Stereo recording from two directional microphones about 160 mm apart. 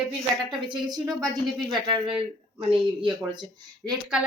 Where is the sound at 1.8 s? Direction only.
30° right (ahead or behind).